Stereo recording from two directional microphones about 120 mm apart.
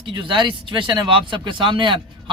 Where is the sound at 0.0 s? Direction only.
45° right (ahead or behind).